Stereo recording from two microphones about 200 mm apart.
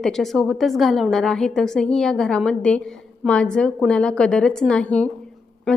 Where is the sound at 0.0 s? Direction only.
Centre (ahead or behind).